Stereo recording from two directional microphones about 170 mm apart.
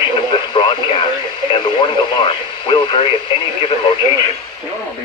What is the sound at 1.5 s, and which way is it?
Speech, 25° left (ahead or behind).